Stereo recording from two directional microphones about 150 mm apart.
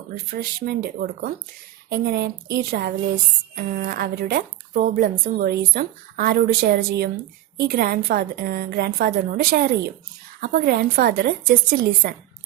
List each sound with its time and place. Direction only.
0.3 s a woman's voice: 75° right (ahead or behind)
3.5 s a woman's voice: 75° right (ahead or behind)